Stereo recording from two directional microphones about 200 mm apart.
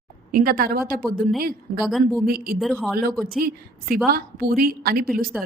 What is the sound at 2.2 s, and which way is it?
Speech, 50° right (ahead or behind).